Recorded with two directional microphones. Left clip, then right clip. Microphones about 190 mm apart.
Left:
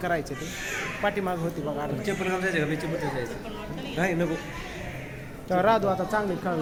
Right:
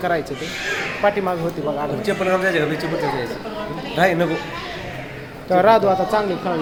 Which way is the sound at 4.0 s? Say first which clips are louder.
Right 10 dB; 60° right (ahead or behind).